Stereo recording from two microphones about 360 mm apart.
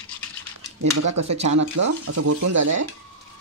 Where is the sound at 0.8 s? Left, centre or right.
Right.